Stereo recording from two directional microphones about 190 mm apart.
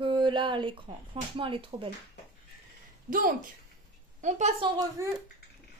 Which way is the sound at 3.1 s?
45° right (ahead or behind).